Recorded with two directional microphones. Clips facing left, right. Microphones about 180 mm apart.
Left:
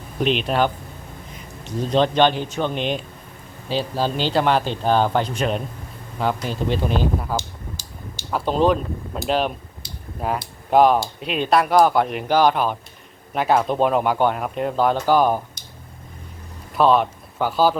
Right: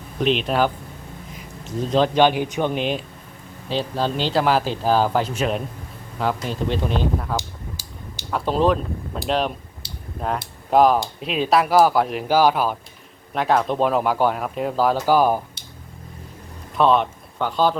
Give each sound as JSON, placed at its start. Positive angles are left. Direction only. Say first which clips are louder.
{"t": 0.2, "sound": "speech", "louder": "even", "side_deg": 0}
{"t": 9.8, "sound": "a sound", "louder": "even", "side_deg": -30}
{"t": 10.2, "sound": "speech", "louder": "left 1 dB", "side_deg": 5}
{"t": 16.7, "sound": "speech", "louder": "left 1 dB", "side_deg": 0}